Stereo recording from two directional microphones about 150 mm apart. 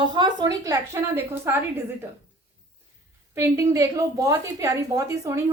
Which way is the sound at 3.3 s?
20° right (ahead or behind).